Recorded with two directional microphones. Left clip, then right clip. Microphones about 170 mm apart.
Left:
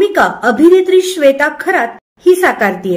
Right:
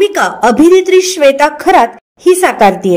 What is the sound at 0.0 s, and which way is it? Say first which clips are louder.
Speech: right 1 dB; 35° right (ahead or behind).